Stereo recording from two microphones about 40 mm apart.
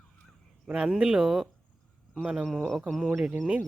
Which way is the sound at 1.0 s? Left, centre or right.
Right.